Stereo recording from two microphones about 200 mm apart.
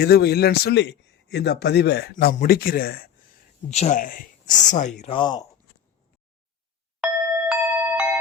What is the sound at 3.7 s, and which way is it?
Speech, 35° left (ahead or behind).